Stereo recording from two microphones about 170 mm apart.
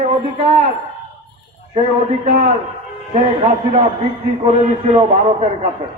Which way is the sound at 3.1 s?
35° right (ahead or behind).